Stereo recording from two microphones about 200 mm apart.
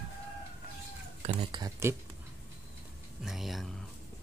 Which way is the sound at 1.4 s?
25° right (ahead or behind).